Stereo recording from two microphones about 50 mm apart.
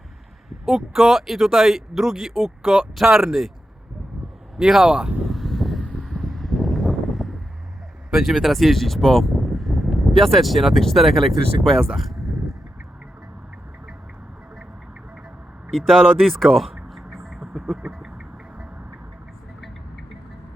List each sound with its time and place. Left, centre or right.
0.5 s speech: centre
4.5 s speech: centre
5.2 s a sound: centre
6.1 s vehicle: centre
8.1 s speech: centre
11.9 s speech: centre
15.7 s speech: centre
16.9 s a sound: centre